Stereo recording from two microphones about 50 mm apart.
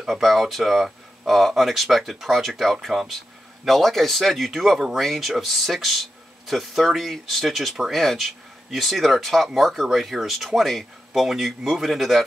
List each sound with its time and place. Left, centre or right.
0.0 s speech: centre